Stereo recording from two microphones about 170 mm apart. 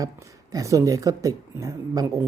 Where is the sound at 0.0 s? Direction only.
20° right (ahead or behind).